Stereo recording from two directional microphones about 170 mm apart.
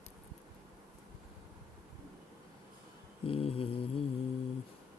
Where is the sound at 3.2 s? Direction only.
35° left (ahead or behind).